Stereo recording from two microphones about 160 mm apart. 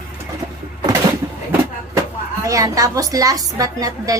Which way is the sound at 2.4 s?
20° right (ahead or behind).